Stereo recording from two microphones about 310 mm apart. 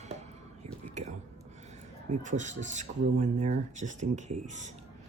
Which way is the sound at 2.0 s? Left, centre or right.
Right.